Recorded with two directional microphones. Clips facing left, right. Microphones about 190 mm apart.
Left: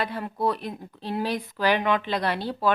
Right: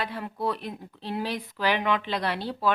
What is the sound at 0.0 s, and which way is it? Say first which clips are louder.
A woman's voice: left 3 dB; 45° left (ahead or behind).